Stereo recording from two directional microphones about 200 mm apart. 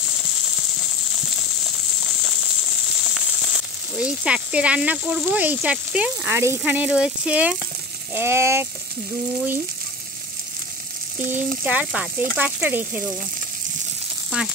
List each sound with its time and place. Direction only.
3.0 s speech: centre (ahead or behind)
11.1 s frying: 40° right (ahead or behind)
11.6 s speech: 5° right (ahead or behind)